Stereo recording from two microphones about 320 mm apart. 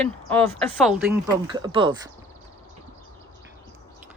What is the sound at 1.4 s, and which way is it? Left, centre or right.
Speech, centre.